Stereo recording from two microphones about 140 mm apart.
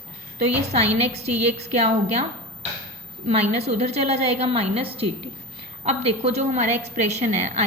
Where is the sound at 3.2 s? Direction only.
50° right (ahead or behind).